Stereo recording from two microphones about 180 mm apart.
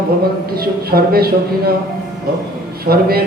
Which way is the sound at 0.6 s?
55° right (ahead or behind).